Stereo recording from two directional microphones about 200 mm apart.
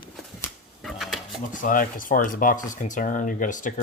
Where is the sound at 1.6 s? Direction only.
45° left (ahead or behind).